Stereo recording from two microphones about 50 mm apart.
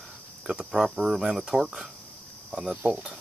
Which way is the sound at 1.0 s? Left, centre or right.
Centre.